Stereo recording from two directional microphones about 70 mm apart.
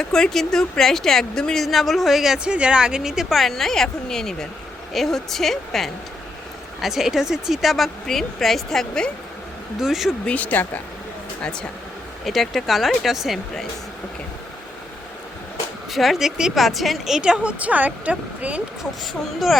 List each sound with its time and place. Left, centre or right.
0.0 s speech: centre
9.8 s speech: centre
10.2 s speech: left
11.4 s speech: centre
12.2 s speech: centre
15.9 s speech: centre
17.2 s a woman's voice: centre